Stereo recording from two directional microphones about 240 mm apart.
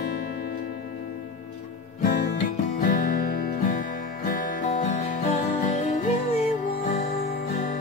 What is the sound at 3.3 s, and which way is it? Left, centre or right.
Music, left.